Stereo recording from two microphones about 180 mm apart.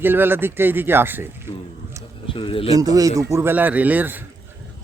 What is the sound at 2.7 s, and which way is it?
Speech, 20° right (ahead or behind).